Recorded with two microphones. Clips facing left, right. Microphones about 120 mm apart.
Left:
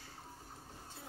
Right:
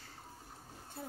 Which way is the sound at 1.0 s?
55° right (ahead or behind).